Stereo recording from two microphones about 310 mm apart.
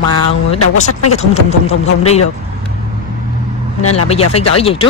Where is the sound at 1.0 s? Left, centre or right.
Left.